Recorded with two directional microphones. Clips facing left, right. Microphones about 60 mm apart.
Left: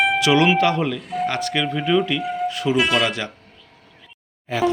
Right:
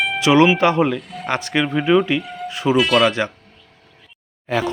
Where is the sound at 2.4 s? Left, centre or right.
Right.